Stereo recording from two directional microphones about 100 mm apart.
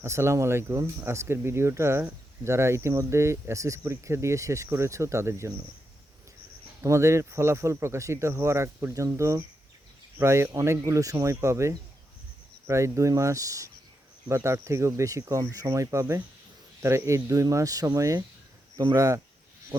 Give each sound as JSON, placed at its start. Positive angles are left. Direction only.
{"t": 0.0, "sound": "speech", "side_deg": -25}
{"t": 6.8, "sound": "speech", "side_deg": -30}